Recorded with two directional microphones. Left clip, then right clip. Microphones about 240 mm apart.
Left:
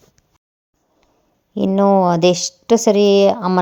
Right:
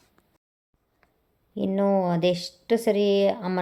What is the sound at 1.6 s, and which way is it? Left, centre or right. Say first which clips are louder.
Speech: left 10 dB; left.